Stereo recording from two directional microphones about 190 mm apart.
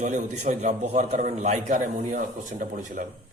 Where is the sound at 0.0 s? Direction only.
40° right (ahead or behind).